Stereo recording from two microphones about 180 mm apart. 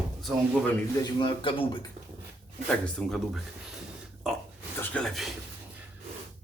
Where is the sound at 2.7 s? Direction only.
Centre (ahead or behind).